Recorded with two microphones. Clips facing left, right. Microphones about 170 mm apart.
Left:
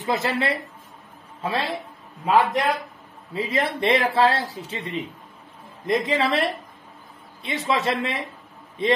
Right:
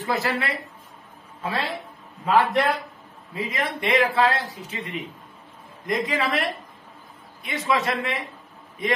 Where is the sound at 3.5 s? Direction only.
35° left (ahead or behind).